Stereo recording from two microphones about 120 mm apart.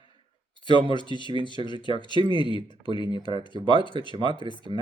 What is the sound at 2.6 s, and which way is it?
Speech, 40° left (ahead or behind).